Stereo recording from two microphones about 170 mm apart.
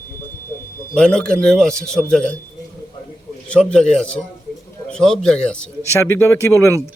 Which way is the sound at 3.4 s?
5° left (ahead or behind).